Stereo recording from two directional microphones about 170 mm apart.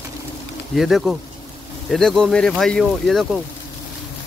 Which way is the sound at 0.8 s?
Centre (ahead or behind).